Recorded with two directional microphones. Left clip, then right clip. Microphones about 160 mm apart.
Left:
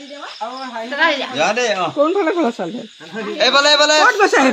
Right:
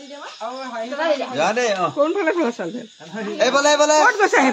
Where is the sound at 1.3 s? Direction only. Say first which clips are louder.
Left 2 dB; 90° right.